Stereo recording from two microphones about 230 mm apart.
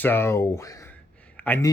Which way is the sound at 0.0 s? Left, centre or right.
Centre.